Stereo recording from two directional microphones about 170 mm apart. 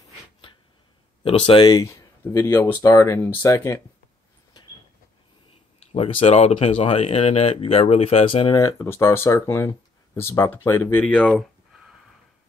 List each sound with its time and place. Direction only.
1.2 s speech: 30° left (ahead or behind)
5.8 s speech: 40° left (ahead or behind)
8.5 s speech: 15° left (ahead or behind)